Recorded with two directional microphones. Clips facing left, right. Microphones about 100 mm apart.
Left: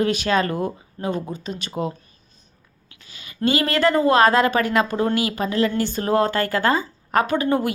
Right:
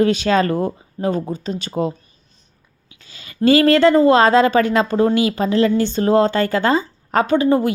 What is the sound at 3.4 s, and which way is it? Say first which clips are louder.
Speech: right 7 dB; 35° right (ahead or behind).